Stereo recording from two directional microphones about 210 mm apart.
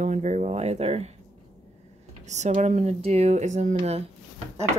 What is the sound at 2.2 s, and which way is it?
Speech, 35° right (ahead or behind).